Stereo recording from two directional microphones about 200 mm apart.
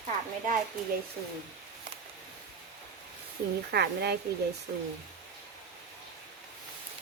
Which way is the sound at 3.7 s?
55° right (ahead or behind).